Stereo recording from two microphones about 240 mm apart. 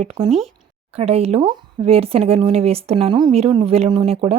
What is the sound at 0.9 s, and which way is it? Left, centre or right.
Speech, right.